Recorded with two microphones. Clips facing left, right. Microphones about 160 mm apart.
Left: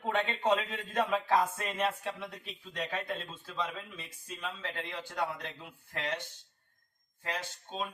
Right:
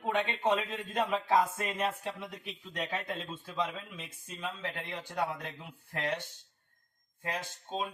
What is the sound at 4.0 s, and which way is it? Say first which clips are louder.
Speech: right 1 dB; 15° right (ahead or behind).